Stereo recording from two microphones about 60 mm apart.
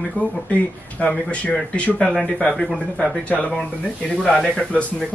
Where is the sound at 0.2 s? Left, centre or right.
Left; by 3.1 s centre.